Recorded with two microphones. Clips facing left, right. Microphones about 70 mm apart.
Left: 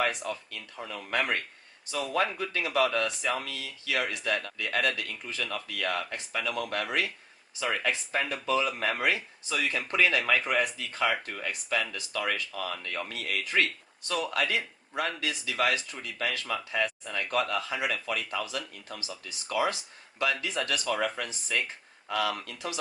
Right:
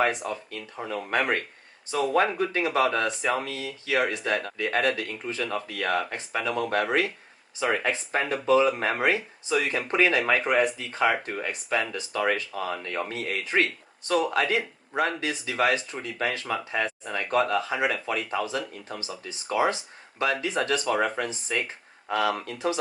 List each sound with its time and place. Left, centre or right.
0.0 s speech: right